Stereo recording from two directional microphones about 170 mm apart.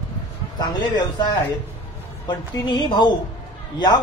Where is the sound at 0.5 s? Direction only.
25° left (ahead or behind).